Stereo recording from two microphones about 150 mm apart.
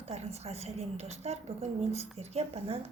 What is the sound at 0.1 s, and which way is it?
A woman's voice, 45° right (ahead or behind).